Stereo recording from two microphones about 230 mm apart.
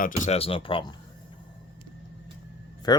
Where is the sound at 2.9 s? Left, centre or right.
Centre.